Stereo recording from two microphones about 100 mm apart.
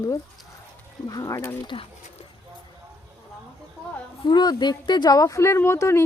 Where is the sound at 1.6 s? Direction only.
60° left (ahead or behind).